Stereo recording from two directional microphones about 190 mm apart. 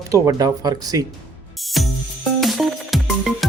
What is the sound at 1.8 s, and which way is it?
Music, centre (ahead or behind).